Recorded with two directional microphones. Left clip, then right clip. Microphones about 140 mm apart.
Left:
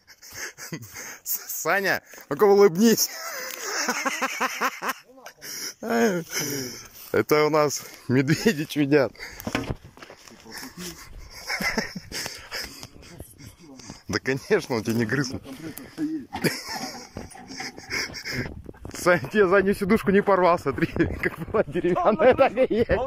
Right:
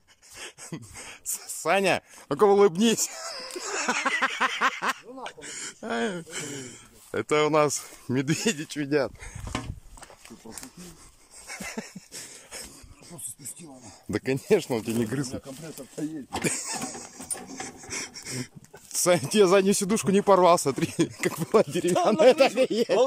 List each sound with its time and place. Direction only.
0.4 s a sound: 20° right (ahead or behind)
1.5 s speech: 15° right (ahead or behind)
11.4 s dog: 15° right (ahead or behind); by 12.6 s 30° right (ahead or behind)
13.8 s speech: 25° right (ahead or behind)
16.3 s a sound: 10° right (ahead or behind)
17.5 s speech: 15° right (ahead or behind)